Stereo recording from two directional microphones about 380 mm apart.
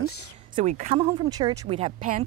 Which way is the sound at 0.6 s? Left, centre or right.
Centre.